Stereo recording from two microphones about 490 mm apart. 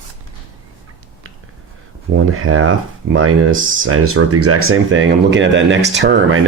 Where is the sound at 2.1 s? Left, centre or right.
Right.